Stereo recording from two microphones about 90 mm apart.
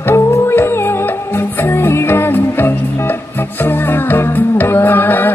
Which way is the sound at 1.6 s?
25° left (ahead or behind).